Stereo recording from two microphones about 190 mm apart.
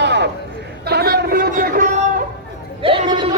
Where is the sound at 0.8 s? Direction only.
55° right (ahead or behind).